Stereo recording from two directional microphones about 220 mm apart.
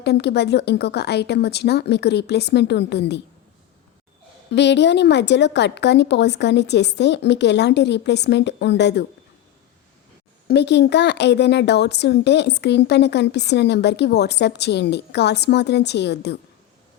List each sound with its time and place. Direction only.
0.0 s speech: 50° left (ahead or behind)
4.5 s speech: 50° left (ahead or behind)
10.5 s speech: 50° left (ahead or behind)